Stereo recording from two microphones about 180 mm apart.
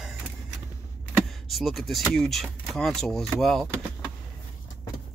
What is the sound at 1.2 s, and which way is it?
Speech, centre (ahead or behind).